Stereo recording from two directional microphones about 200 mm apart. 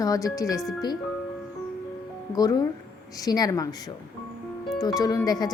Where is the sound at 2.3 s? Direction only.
20° left (ahead or behind).